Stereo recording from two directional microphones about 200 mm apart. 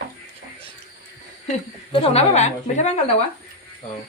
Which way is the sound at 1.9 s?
30° left (ahead or behind).